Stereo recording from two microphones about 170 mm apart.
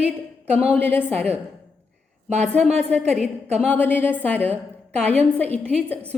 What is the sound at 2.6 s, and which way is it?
Speech, 40° right (ahead or behind).